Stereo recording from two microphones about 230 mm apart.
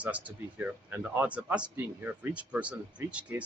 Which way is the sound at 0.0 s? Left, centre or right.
Centre.